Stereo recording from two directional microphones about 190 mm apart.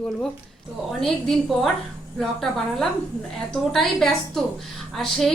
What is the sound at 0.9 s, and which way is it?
A woman's voice, centre (ahead or behind).